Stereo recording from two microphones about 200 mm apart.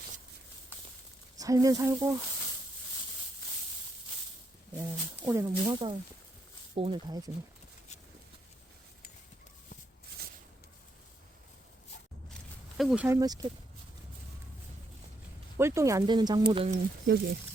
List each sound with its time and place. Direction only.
1.4 s speech: 15° right (ahead or behind)
4.8 s speech: 15° right (ahead or behind)
5.6 s speech: 25° right (ahead or behind)
12.3 s a sound: centre (ahead or behind)
13.1 s speech: 20° right (ahead or behind)
15.5 s speech: 15° right (ahead or behind); by 16.8 s 30° right (ahead or behind)